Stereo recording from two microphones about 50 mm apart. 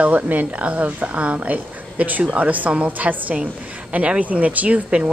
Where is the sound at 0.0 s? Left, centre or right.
Right.